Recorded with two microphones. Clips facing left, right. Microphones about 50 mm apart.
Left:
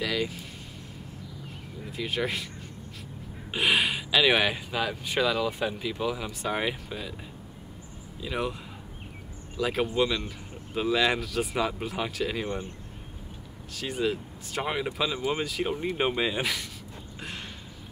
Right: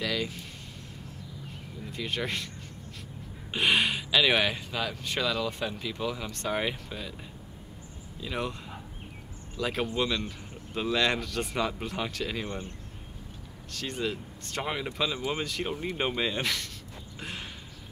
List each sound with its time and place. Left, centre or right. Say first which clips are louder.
0.0 s speech: left 2 dB; centre
1.8 s speech: left 3 dB; centre
3.5 s speech: left 1 dB; centre
8.2 s speech: left 2 dB; centre
9.6 s speech: left 3 dB; centre
12.4 s speech: left 4 dB; centre
13.7 s speech: left 4 dB; centre